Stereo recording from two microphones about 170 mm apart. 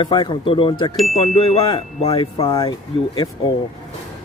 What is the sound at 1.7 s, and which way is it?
Speech, 30° left (ahead or behind).